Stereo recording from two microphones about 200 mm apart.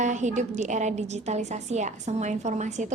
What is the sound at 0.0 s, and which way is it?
A woman's voice, 35° right (ahead or behind).